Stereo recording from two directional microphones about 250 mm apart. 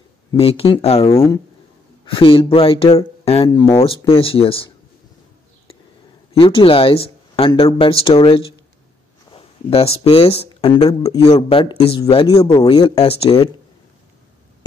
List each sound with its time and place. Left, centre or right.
0.3 s speech: left
6.3 s speech: left